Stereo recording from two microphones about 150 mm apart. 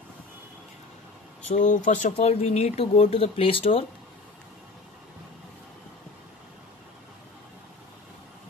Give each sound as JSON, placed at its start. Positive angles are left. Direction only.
{"t": 1.5, "sound": "speech", "side_deg": 55}
{"t": 2.1, "sound": "speech", "side_deg": 45}